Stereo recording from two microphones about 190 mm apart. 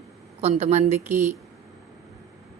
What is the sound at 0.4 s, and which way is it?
Speech, 35° right (ahead or behind).